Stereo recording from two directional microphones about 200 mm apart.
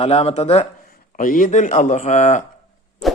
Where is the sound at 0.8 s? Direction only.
45° left (ahead or behind).